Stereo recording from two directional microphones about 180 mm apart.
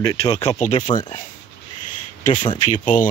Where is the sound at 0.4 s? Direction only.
40° left (ahead or behind).